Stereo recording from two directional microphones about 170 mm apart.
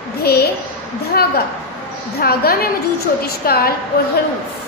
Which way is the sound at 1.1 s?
65° left (ahead or behind).